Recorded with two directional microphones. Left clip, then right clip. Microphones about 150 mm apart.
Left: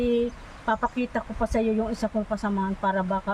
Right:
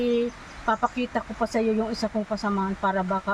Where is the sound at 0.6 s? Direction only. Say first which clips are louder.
Right 1 dB; 20° left (ahead or behind).